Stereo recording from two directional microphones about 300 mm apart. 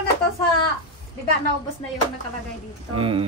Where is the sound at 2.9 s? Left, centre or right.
Centre.